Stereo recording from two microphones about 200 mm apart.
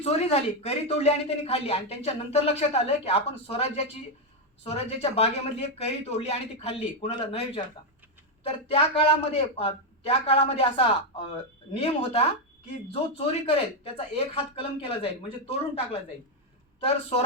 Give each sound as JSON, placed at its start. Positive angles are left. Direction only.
{"t": 0.0, "sound": "speech", "side_deg": 30}